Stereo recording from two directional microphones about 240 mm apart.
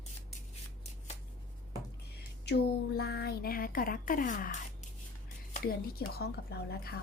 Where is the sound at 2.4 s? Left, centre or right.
Left.